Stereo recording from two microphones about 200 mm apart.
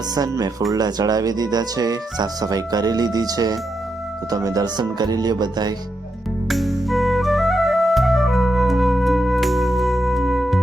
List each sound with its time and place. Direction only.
0.1 s speech: 20° right (ahead or behind)
6.5 s music: centre (ahead or behind)